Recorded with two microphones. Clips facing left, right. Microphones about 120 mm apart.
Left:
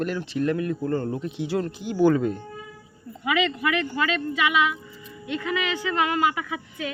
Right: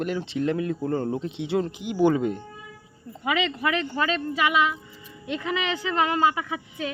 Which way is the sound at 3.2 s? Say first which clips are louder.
Left 1 dB; 30° right (ahead or behind).